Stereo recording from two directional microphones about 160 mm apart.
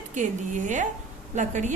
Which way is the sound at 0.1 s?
50° right (ahead or behind).